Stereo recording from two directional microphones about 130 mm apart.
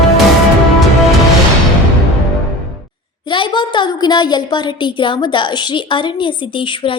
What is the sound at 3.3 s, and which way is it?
A woman's voice, 40° left (ahead or behind).